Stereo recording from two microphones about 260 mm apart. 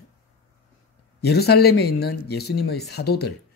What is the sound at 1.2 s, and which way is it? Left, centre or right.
Speech, left.